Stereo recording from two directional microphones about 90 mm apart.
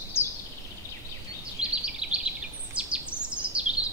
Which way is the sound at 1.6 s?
10° right (ahead or behind).